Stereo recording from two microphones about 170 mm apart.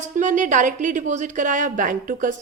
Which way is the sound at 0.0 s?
45° right (ahead or behind).